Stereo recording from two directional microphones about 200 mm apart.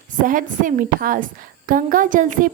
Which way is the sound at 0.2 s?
40° right (ahead or behind).